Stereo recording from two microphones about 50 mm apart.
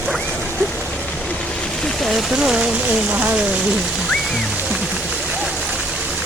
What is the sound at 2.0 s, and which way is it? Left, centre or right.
Speech, centre.